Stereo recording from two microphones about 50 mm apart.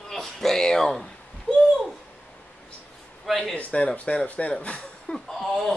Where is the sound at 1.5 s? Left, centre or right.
Centre.